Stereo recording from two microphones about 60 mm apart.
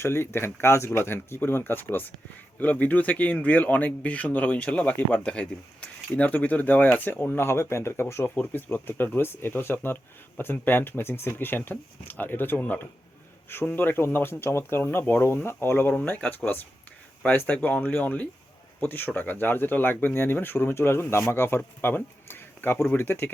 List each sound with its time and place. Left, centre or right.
0.0 s speech: left
5.2 s speech: centre; by 8.3 s left
8.4 s speech: left
15.9 s speech: left
20.7 s speech: left